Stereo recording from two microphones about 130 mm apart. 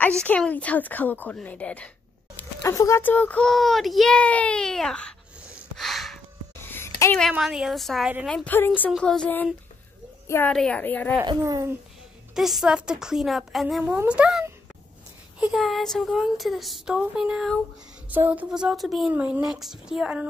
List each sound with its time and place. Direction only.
0.0 s a child's voice: 10° left (ahead or behind)
2.6 s a child's voice: 20° left (ahead or behind); by 5.1 s 5° left (ahead or behind)
5.5 s a sound: centre (ahead or behind)
6.6 s a sound: 20° left (ahead or behind)
7.2 s speech: centre (ahead or behind)
8.5 s a child's voice: 15° left (ahead or behind)
10.5 s a child's voice: 5° left (ahead or behind)
11.2 s speech: 30° right (ahead or behind)
12.4 s speech: 5° right (ahead or behind)
19.1 s speech: 10° right (ahead or behind)